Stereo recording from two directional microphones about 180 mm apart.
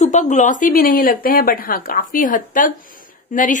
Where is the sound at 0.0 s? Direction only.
40° left (ahead or behind).